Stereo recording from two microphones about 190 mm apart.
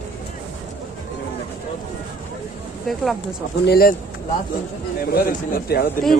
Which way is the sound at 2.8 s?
Centre (ahead or behind).